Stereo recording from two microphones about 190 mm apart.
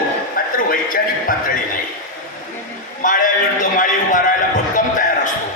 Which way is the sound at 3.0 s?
45° left (ahead or behind).